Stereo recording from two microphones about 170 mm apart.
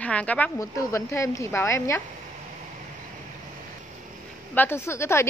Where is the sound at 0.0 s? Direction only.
10° left (ahead or behind).